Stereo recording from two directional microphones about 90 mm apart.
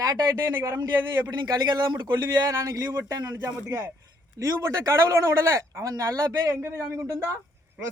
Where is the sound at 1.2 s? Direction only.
50° right (ahead or behind).